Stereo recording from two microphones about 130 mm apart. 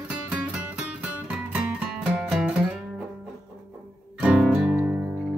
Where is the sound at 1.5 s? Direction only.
10° right (ahead or behind).